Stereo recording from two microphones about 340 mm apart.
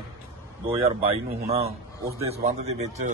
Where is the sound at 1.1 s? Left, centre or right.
Centre.